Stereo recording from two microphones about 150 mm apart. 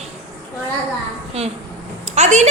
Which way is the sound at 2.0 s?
50° right (ahead or behind).